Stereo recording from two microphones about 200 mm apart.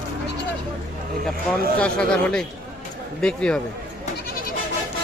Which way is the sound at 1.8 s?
5° left (ahead or behind).